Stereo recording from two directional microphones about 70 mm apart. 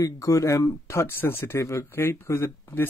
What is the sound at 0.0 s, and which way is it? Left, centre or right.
Speech, left.